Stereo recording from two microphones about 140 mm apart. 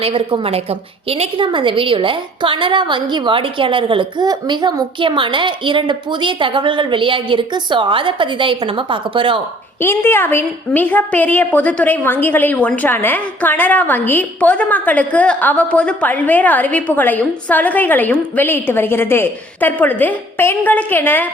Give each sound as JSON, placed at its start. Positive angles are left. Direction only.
{"t": 0.0, "sound": "a woman's voice", "side_deg": -40}
{"t": 9.8, "sound": "a woman's voice", "side_deg": 15}